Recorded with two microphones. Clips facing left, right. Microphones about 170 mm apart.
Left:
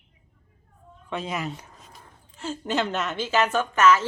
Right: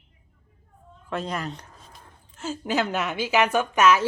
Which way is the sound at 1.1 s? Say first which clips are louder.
Even; centre (ahead or behind).